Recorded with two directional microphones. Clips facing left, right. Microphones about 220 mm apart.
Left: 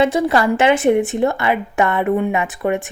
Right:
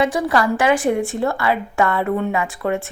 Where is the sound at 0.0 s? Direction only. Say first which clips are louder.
Left 3 dB; 25° left (ahead or behind).